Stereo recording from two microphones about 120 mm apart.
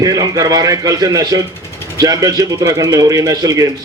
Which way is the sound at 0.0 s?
30° right (ahead or behind).